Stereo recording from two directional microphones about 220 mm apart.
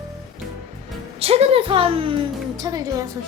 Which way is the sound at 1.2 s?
25° right (ahead or behind).